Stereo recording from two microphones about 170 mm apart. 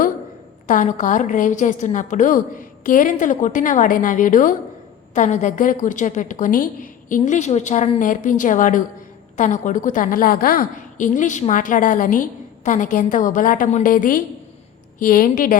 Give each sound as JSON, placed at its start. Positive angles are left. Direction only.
{"t": 0.7, "sound": "a woman's voice", "side_deg": 45}